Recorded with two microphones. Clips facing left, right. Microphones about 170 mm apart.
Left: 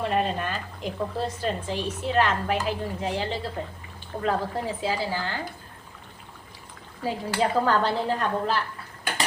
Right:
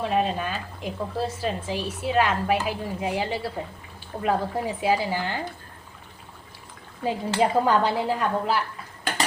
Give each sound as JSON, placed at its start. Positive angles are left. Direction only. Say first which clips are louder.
{"t": 0.0, "sound": "a woman's voice", "louder": "right 1 dB", "side_deg": 0}
{"t": 7.0, "sound": "a woman's voice", "louder": "right 2 dB", "side_deg": -20}